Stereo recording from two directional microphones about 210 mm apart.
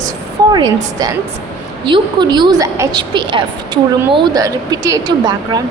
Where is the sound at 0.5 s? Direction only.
20° right (ahead or behind).